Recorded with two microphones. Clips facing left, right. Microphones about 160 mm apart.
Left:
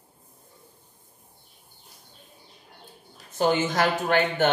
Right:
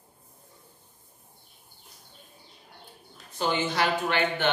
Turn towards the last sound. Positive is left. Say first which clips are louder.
# left 4 dB
turn(degrees=45)  # may be behind; listen again after turning